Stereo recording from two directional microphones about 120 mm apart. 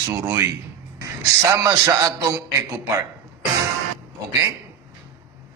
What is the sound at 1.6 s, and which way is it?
Speech, 25° right (ahead or behind).